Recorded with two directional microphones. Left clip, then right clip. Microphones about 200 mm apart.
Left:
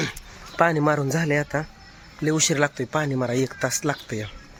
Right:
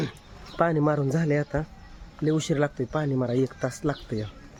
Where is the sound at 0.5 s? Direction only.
5° right (ahead or behind).